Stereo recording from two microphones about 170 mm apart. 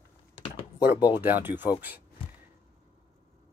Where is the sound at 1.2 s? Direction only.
10° right (ahead or behind).